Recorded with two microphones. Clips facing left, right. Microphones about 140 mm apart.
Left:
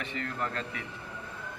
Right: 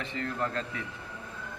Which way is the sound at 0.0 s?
30° right (ahead or behind).